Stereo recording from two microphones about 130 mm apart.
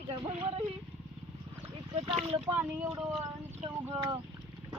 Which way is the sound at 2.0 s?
50° right (ahead or behind).